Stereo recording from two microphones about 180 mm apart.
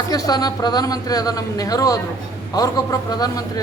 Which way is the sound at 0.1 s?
20° left (ahead or behind).